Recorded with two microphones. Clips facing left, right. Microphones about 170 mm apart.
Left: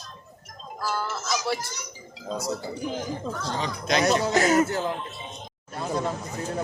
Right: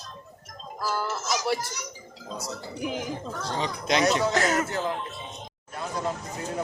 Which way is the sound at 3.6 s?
25° right (ahead or behind).